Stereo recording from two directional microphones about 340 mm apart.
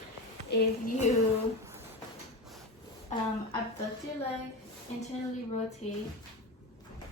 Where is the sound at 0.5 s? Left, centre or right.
Left.